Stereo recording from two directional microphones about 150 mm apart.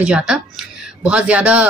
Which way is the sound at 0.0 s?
5° right (ahead or behind).